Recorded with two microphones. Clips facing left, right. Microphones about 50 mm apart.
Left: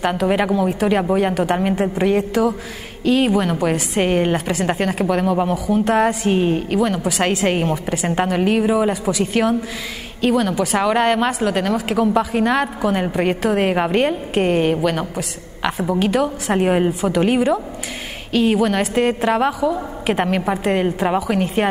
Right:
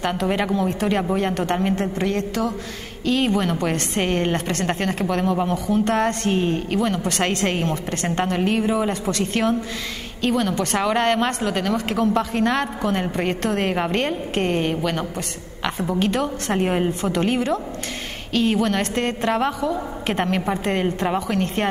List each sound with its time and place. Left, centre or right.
0.0 s a woman's voice: centre